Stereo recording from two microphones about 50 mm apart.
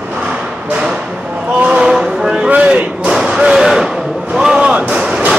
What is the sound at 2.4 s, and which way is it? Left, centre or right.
Vehicle, right.